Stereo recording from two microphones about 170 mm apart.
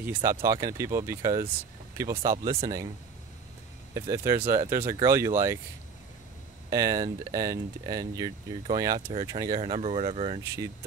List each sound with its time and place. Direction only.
0.0 s speech: 15° right (ahead or behind)
3.9 s speech: 15° right (ahead or behind)
6.7 s speech: 20° right (ahead or behind)
9.6 s speech: 35° right (ahead or behind)
10.4 s speech: 15° right (ahead or behind)